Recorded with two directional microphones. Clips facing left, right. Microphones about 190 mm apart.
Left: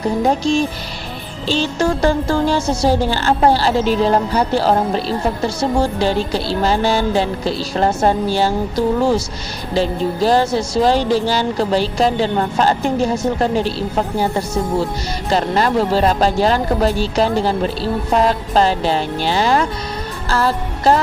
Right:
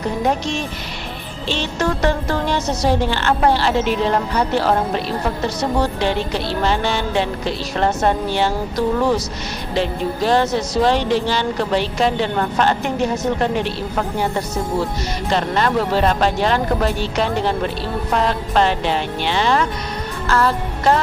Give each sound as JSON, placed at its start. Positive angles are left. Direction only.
{"t": 0.3, "sound": "speech", "side_deg": 30}
{"t": 20.2, "sound": "music", "side_deg": 35}